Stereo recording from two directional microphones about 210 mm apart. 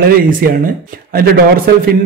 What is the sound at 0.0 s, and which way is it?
Speech, 45° right (ahead or behind).